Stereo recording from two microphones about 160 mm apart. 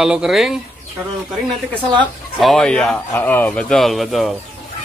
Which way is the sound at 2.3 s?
Centre (ahead or behind).